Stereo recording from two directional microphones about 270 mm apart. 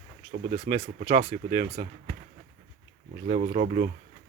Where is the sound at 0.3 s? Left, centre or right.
Right.